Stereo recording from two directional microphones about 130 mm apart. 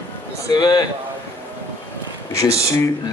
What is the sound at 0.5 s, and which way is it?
Speech, 30° left (ahead or behind).